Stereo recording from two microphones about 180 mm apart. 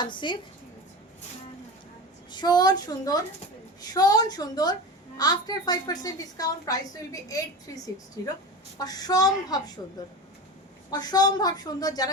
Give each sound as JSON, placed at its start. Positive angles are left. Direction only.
{"t": 0.0, "sound": "a woman's voice", "side_deg": 25}
{"t": 2.3, "sound": "a woman's voice", "side_deg": 25}
{"t": 8.8, "sound": "a woman's voice", "side_deg": 20}
{"t": 10.9, "sound": "a woman's voice", "side_deg": 20}